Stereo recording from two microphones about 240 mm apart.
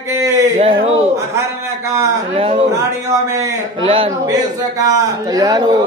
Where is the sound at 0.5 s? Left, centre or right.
Right.